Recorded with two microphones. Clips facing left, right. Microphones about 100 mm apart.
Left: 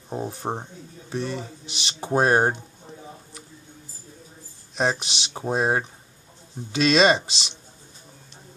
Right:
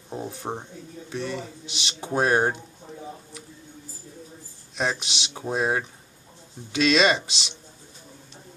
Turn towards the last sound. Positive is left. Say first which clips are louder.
# left 3 dB
turn(degrees=35)  # may be behind; listen again after turning